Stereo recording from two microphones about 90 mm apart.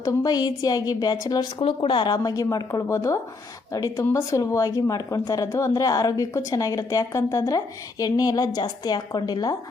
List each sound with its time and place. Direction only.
0.0 s a woman's voice: 45° left (ahead or behind)
1.5 s speech: 80° left
2.1 s a woman's voice: 40° left (ahead or behind)